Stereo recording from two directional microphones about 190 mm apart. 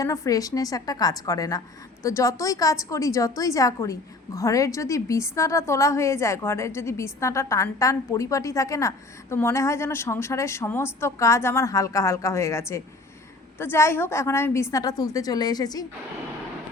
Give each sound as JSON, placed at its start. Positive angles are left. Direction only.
{"t": 0.0, "sound": "a woman's voice", "side_deg": 20}